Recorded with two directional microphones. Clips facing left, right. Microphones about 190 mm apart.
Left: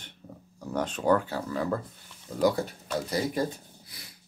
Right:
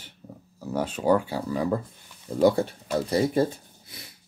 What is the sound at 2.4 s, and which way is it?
Speech, 30° right (ahead or behind).